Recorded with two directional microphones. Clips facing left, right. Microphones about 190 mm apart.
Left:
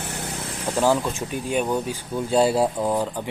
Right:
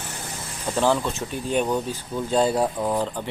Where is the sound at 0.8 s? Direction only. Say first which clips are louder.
Left 1 dB; 10° left (ahead or behind).